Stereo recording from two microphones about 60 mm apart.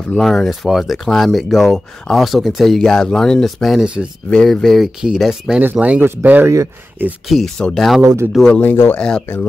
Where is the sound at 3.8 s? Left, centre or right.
Centre.